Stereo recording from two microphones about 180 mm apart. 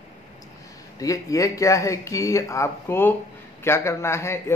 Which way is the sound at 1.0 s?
20° left (ahead or behind).